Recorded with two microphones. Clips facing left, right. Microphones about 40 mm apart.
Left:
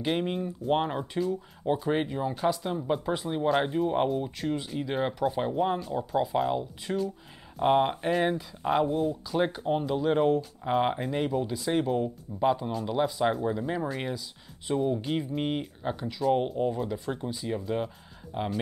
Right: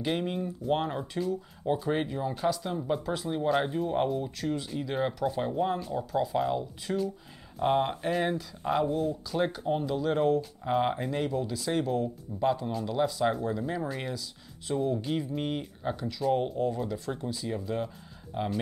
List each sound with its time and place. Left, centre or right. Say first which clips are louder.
0.0 s speech: left 2 dB; centre